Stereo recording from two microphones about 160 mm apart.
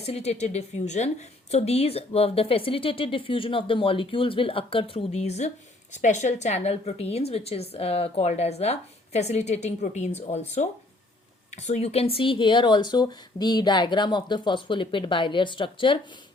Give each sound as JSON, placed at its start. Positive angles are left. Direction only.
{"t": 0.0, "sound": "a woman's voice", "side_deg": 40}
{"t": 11.5, "sound": "a woman's voice", "side_deg": 45}